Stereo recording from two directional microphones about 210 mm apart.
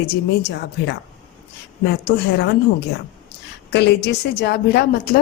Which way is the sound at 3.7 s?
50° left (ahead or behind).